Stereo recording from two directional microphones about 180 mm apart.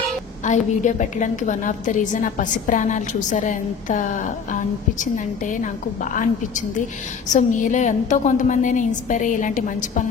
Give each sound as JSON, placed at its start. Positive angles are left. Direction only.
{"t": 0.5, "sound": "a woman's voice", "side_deg": 45}
{"t": 7.2, "sound": "a woman's voice", "side_deg": 45}